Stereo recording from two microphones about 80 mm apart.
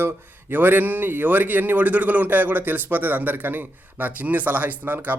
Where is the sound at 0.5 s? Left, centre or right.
Right.